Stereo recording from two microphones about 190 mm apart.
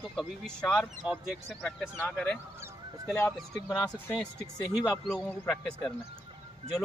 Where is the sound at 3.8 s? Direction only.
5° left (ahead or behind).